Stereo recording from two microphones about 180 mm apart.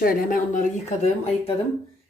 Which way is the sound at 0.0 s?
50° left (ahead or behind).